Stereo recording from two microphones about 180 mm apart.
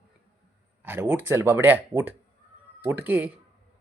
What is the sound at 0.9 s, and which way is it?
Speech, 10° right (ahead or behind).